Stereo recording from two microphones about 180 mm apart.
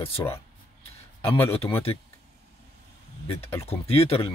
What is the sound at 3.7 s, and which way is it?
Speech, 35° left (ahead or behind).